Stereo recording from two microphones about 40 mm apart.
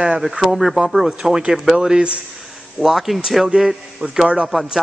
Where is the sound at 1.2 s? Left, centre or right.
Centre.